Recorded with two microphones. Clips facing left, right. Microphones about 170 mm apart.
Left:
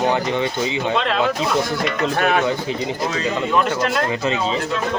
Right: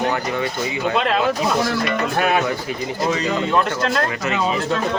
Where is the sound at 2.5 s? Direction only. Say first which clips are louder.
Left 2 dB; 20° left (ahead or behind).